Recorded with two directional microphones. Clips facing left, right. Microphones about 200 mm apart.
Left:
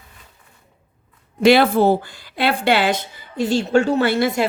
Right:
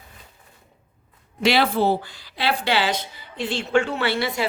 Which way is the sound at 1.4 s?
50° left (ahead or behind).